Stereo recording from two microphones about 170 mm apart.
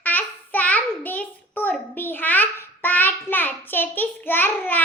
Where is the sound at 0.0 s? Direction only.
10° left (ahead or behind).